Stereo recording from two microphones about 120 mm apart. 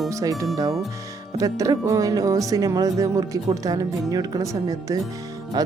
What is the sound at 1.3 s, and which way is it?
Speech, 30° right (ahead or behind).